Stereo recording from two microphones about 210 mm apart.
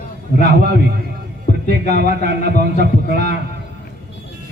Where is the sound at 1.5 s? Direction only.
40° left (ahead or behind).